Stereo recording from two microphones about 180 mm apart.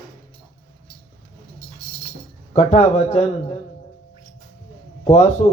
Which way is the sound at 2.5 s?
35° left (ahead or behind).